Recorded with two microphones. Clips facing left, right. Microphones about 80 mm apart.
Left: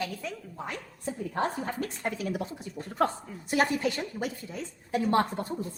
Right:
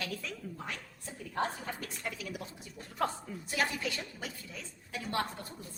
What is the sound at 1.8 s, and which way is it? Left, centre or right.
A woman's voice, left.